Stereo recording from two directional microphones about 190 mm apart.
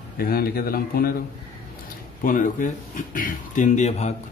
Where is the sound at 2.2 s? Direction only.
45° left (ahead or behind).